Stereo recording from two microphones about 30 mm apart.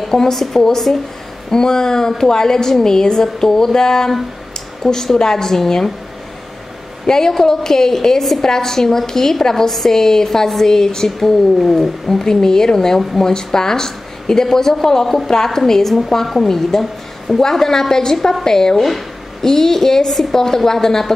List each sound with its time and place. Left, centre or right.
0.1 s a woman's voice: centre
7.1 s a woman's voice: centre
8.2 s a woman's voice: centre
18.8 s a woman's voice: centre